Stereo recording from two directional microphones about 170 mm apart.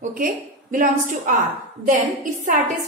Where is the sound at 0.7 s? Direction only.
50° right (ahead or behind).